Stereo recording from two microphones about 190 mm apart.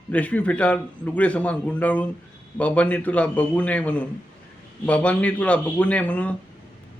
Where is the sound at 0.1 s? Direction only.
5° left (ahead or behind).